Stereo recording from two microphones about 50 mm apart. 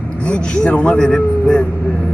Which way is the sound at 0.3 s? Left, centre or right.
Centre.